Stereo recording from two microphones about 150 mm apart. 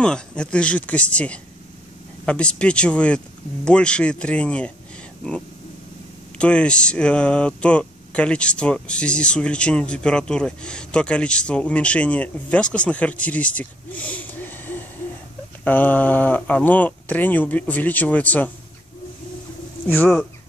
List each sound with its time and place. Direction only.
0.0 s speech: 5° left (ahead or behind)
6.3 s speech: 5° left (ahead or behind)